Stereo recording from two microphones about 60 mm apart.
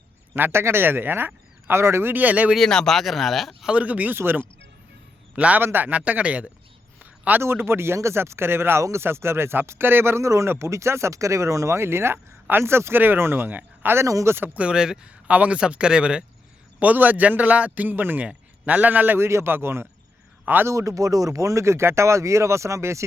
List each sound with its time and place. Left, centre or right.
0.3 s speech: right
1.6 s speech: right
2.1 s a man's voice: right
2.6 s speech: centre
3.7 s a man's voice: right
4.1 s speech: right
5.4 s a man's voice: right
7.0 s a sound: right
7.4 s speech: right
14.6 s speech: centre
16.8 s a man's voice: right
19.2 s speech: right
20.7 s speech: right